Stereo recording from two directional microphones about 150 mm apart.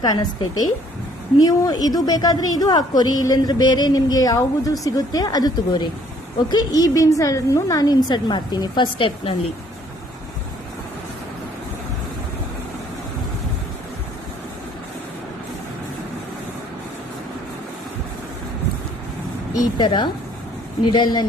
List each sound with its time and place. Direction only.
0.0 s a woman's voice: 25° left (ahead or behind)
19.8 s a woman's voice: 30° left (ahead or behind)